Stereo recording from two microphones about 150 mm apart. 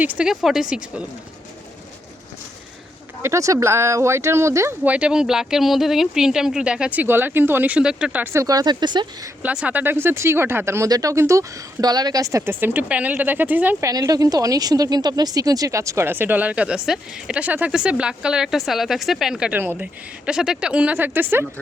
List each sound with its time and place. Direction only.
0.0 s speech: 10° right (ahead or behind)
3.2 s speech: 20° right (ahead or behind)
9.4 s speech: 10° right (ahead or behind)
13.9 s speech: 25° right (ahead or behind)